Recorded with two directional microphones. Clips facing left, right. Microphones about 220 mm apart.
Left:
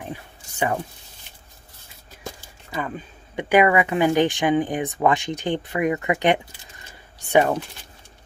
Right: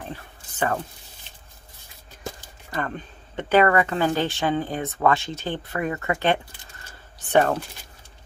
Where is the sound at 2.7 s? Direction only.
5° left (ahead or behind).